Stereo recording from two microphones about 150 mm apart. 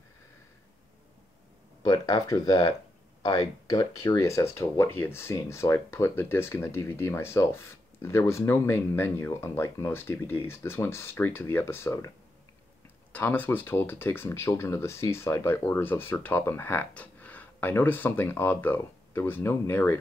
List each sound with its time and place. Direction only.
1.8 s speech: 25° left (ahead or behind)
13.1 s speech: 10° left (ahead or behind)